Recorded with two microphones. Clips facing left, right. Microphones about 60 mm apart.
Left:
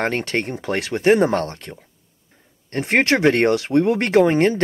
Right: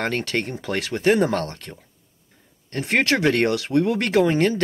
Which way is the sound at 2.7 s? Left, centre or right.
Left.